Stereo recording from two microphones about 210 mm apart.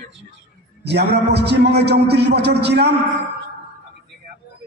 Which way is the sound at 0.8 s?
50° right (ahead or behind).